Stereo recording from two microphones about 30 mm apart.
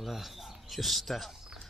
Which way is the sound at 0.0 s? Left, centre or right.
Centre.